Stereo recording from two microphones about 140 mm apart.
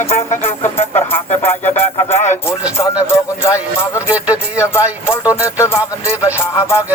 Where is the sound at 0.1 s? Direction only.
50° left (ahead or behind).